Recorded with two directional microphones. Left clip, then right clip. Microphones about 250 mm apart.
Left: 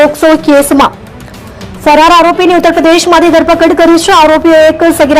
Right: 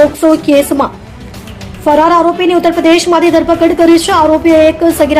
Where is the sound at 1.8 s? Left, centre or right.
Centre.